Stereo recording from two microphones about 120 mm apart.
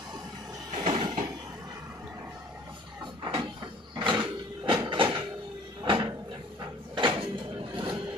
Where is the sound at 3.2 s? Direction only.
40° right (ahead or behind).